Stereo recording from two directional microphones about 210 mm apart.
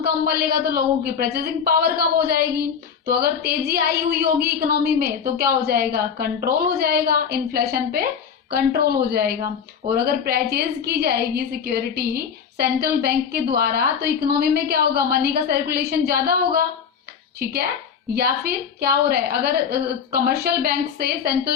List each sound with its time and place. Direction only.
0.0 s a woman's voice: 45° right (ahead or behind)
17.4 s a woman's voice: 45° right (ahead or behind)